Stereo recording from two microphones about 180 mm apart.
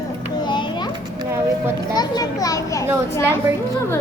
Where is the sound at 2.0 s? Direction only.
20° left (ahead or behind).